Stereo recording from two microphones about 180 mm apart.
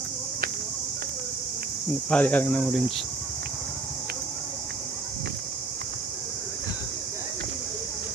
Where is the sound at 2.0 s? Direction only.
10° left (ahead or behind).